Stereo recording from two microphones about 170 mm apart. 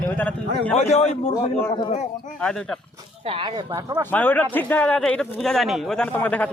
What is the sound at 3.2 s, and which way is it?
Speech, 30° right (ahead or behind).